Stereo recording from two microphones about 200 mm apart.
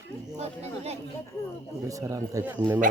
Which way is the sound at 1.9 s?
15° right (ahead or behind).